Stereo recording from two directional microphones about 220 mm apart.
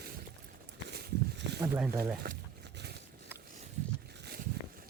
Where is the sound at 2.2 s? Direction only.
50° right (ahead or behind).